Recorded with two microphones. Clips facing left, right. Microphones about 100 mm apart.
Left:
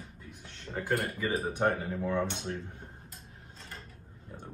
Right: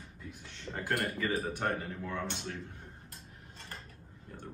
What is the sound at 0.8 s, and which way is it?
Speech, 5° left (ahead or behind).